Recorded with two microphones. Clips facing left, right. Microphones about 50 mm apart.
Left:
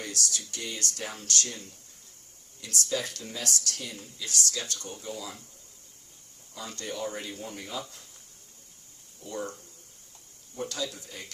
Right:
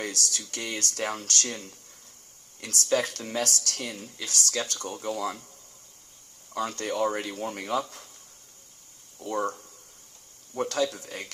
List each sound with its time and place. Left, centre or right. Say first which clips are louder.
0.0 s speech: right 2 dB; right
6.5 s speech: right 8 dB; right
9.2 s speech: right 7 dB; right
10.6 s speech: right 7 dB; right